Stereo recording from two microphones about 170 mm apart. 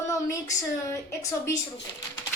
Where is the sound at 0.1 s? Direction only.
20° left (ahead or behind).